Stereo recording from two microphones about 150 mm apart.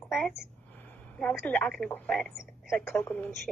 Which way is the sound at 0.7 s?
10° left (ahead or behind).